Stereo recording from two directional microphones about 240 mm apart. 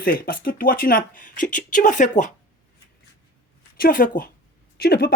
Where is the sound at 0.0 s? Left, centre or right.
Left.